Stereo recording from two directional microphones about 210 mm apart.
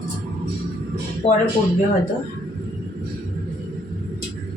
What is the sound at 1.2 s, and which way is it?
Speech, 30° left (ahead or behind).